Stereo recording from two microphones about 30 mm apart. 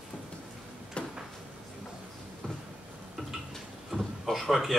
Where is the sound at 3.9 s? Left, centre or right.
Centre.